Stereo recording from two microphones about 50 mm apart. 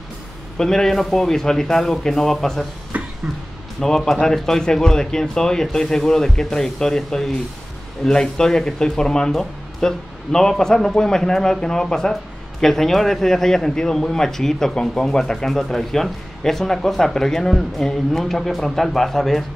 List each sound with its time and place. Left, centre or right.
0.6 s speech: centre
2.9 s music: right
3.8 s speech: centre